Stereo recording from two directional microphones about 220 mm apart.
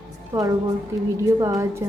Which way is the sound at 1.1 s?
15° right (ahead or behind).